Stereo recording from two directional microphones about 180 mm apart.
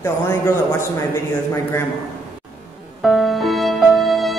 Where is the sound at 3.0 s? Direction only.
Centre (ahead or behind).